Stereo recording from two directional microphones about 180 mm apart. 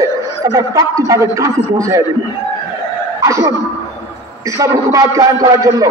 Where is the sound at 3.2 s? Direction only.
20° right (ahead or behind).